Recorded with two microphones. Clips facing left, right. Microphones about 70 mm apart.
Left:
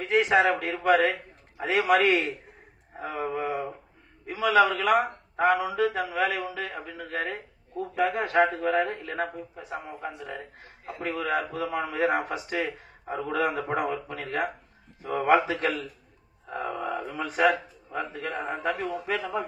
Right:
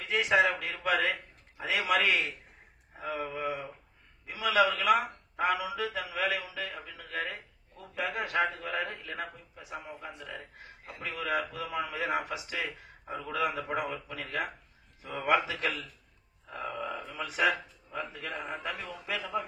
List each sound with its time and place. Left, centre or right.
0.0 s speech: left